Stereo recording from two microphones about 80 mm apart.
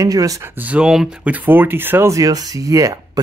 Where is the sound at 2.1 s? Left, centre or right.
Right.